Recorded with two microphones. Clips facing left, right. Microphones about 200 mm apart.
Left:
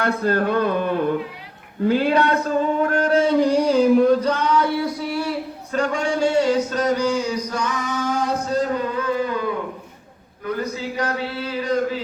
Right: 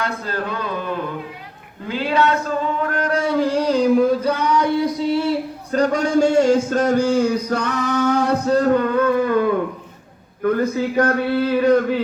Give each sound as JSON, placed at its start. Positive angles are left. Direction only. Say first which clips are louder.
{"t": 0.0, "sound": "speech", "louder": "left 5 dB", "side_deg": 55}
{"t": 2.9, "sound": "a sound", "louder": "left 3 dB", "side_deg": 30}
{"t": 5.7, "sound": "speech", "louder": "right 5 dB", "side_deg": -40}